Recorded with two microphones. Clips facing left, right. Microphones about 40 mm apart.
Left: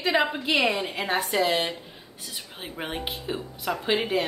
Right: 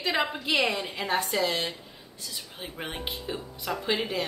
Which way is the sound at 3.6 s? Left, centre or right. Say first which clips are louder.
Left 3 dB; left.